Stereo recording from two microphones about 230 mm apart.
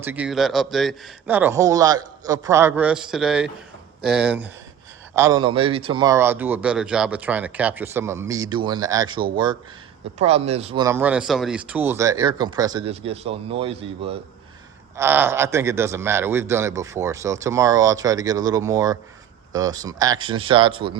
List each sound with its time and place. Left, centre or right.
0.0 s speech: centre
10.2 s speech: right
10.8 s speech: centre; by 14.2 s right
14.9 s speech: centre